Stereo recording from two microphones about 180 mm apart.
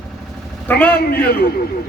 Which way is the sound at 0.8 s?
60° left (ahead or behind).